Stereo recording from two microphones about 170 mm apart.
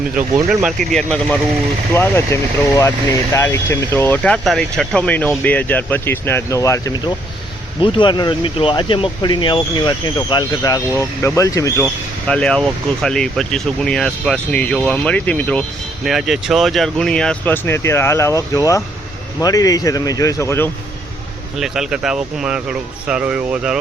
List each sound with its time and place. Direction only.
0.4 s speech: centre (ahead or behind)
1.9 s speech: 15° left (ahead or behind)
12.3 s speech: 5° left (ahead or behind)
16.0 s speech: centre (ahead or behind); by 20.7 s 15° left (ahead or behind)
21.6 s speech: 5° right (ahead or behind)